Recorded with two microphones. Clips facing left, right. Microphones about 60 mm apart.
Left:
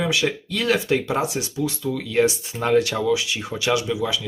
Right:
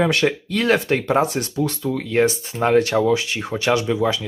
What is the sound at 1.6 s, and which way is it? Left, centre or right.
Speech, right.